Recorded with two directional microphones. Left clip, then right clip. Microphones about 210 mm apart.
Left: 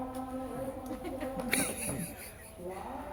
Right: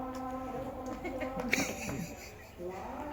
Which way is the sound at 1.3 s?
5° left (ahead or behind).